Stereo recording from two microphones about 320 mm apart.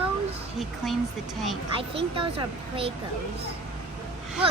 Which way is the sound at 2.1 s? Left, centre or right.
Centre.